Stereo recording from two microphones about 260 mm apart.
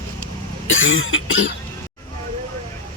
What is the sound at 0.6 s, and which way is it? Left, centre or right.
Cough, left.